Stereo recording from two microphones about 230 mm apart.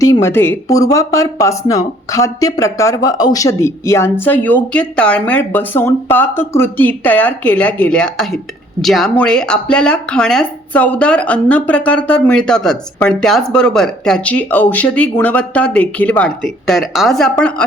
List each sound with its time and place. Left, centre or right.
0.0 s speech: centre